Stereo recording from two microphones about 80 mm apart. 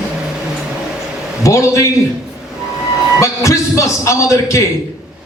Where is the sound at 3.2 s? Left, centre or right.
Left.